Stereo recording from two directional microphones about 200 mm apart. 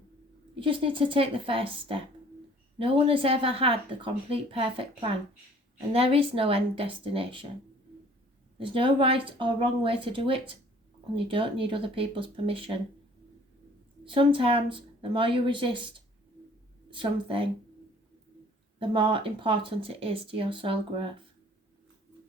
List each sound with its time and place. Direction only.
0.6 s speech: 25° right (ahead or behind)
8.5 s speech: 25° right (ahead or behind)
14.0 s speech: 25° right (ahead or behind)
18.8 s speech: 25° right (ahead or behind)